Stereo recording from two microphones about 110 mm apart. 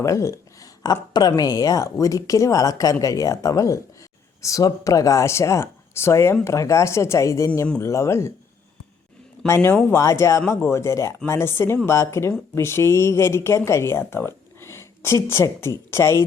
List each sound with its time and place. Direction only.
0.0 s a sound: 30° left (ahead or behind)
1.4 s speech: 35° left (ahead or behind)
9.5 s speech: 20° left (ahead or behind)